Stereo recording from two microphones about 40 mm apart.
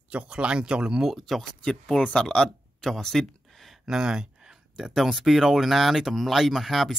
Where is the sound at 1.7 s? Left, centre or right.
Left; by 3.8 s centre.